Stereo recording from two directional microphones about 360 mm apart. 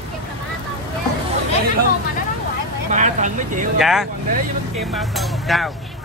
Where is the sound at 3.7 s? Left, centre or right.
Centre.